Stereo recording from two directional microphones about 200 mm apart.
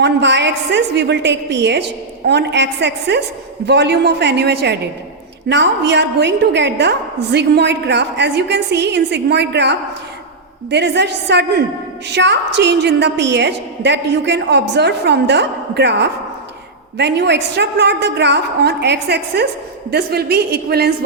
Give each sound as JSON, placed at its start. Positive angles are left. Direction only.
{"t": 0.0, "sound": "a woman's voice", "side_deg": -60}